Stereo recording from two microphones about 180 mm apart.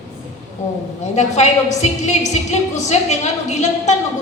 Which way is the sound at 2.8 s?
40° left (ahead or behind).